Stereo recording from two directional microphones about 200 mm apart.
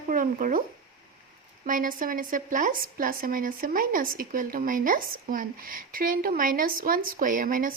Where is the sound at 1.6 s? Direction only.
40° right (ahead or behind).